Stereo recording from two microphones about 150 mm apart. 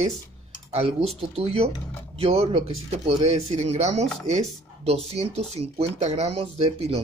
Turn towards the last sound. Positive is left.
turn(degrees=-40)  # may be behind; listen again after turning